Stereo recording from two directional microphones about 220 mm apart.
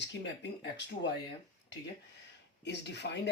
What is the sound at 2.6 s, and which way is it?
Speech, 50° left (ahead or behind).